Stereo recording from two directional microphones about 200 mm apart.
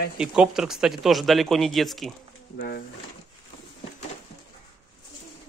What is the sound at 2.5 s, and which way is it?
Speech, 55° left (ahead or behind).